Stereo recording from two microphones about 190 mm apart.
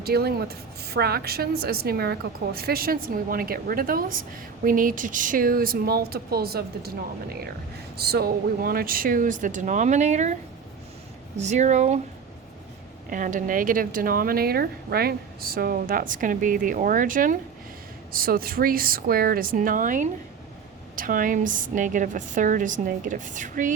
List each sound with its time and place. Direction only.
0.0 s speech: 55° right (ahead or behind); by 10.3 s 40° right (ahead or behind)
11.3 s speech: 40° right (ahead or behind)
13.1 s speech: 45° right (ahead or behind)